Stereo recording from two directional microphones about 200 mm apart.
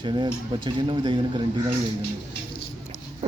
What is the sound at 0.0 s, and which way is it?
Speech, 20° right (ahead or behind).